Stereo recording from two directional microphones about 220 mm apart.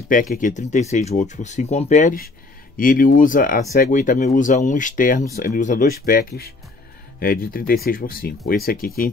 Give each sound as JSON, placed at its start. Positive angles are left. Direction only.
{"t": 0.1, "sound": "speech", "side_deg": 40}